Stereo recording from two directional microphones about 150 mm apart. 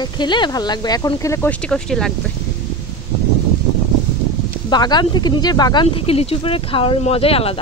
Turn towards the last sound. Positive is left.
turn(degrees=40)  # may be behind; listen again after turning